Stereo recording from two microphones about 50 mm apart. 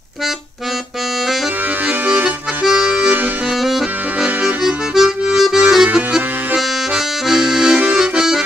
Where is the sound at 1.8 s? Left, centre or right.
Right.